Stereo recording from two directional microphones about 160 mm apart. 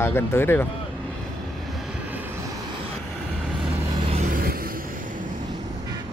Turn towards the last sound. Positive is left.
turn(degrees=-55)  # may be behind; listen again after turning